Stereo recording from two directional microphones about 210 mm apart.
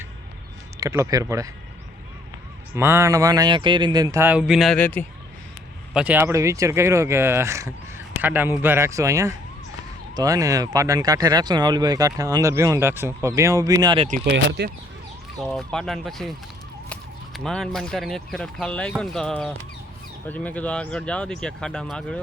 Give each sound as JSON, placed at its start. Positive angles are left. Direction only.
{"t": 0.8, "sound": "speech", "side_deg": -15}
{"t": 2.7, "sound": "speech", "side_deg": -10}
{"t": 5.9, "sound": "speech", "side_deg": -5}
{"t": 14.1, "sound": "speech", "side_deg": -50}
{"t": 15.4, "sound": "speech", "side_deg": 5}